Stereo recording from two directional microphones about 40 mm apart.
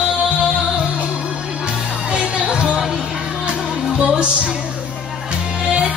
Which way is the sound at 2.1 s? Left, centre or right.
Right.